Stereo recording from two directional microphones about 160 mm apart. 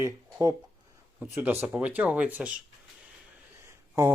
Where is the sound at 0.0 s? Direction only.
15° right (ahead or behind).